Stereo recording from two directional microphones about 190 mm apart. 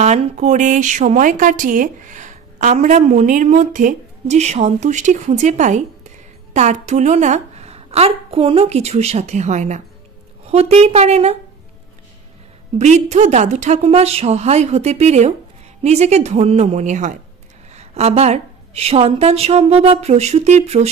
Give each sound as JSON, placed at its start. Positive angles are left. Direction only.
{"t": 0.0, "sound": "speech", "side_deg": -40}
{"t": 12.7, "sound": "speech", "side_deg": -35}